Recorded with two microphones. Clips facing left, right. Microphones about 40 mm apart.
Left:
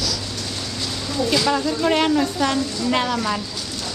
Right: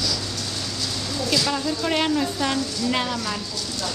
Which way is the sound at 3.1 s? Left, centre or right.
Centre.